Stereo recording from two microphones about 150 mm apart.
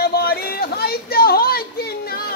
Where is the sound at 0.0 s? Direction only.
90° left.